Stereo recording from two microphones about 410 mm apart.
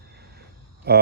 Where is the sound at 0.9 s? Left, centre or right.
Right.